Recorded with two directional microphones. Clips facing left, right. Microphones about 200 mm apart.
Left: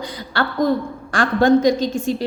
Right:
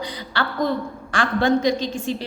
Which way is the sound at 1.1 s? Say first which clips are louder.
Left 5 dB; 45° left (ahead or behind).